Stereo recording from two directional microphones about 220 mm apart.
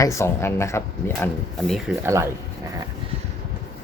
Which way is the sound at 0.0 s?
15° left (ahead or behind).